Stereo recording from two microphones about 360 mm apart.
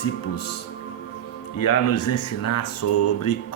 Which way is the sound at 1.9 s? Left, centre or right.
Left.